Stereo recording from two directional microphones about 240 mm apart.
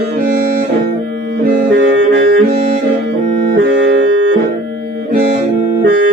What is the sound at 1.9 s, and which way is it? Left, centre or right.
Music, right.